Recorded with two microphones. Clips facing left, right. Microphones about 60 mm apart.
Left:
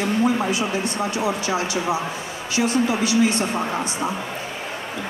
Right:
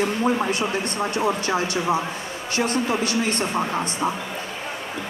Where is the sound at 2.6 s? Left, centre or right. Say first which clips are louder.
Left 2 dB; right.